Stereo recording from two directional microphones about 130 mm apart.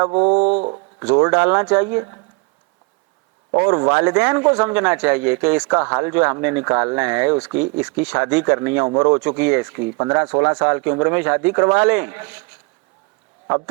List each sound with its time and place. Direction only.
0.1 s speech: 25° right (ahead or behind)
0.3 s a sound: 55° right (ahead or behind)
0.9 s speech: 20° right (ahead or behind)
3.6 s speech: 20° right (ahead or behind)